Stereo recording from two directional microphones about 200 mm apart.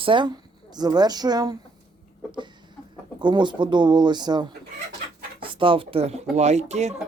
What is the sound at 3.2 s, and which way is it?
Speech, 25° right (ahead or behind).